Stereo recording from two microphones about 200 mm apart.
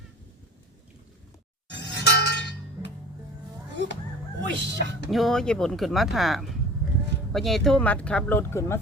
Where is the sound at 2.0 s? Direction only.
55° left (ahead or behind).